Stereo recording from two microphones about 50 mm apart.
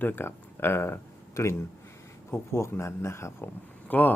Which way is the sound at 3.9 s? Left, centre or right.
Left.